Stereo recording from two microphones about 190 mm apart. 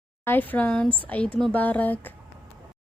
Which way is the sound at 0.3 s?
10° left (ahead or behind).